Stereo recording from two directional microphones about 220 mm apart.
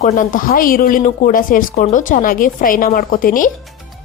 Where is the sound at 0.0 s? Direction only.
35° left (ahead or behind).